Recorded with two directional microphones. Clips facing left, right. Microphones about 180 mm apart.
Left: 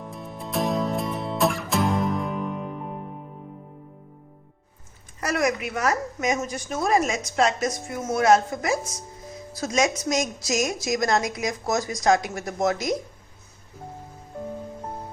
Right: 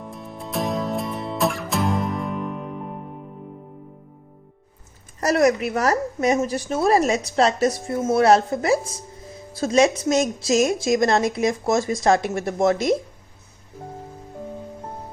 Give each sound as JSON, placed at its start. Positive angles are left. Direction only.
{"t": 0.0, "sound": "music", "side_deg": 0}
{"t": 5.2, "sound": "a woman's voice", "side_deg": -35}